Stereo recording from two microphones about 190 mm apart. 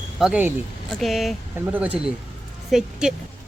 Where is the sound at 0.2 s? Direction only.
5° right (ahead or behind).